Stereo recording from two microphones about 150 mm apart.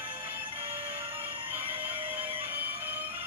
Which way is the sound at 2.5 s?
10° right (ahead or behind).